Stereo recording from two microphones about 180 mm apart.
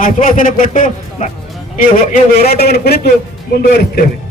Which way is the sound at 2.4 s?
60° left (ahead or behind).